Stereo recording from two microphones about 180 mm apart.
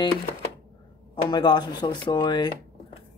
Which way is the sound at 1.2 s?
25° left (ahead or behind).